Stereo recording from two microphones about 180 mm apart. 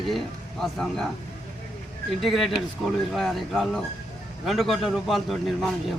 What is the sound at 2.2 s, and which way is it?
A man's voice, centre (ahead or behind).